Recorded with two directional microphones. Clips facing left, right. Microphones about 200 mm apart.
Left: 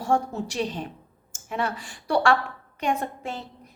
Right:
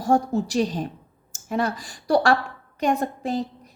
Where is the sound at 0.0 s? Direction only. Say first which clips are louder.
Right 4 dB; 35° right (ahead or behind).